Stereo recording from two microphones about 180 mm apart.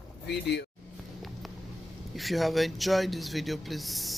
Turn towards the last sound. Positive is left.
turn(degrees=0)  # may be behind; listen again after turning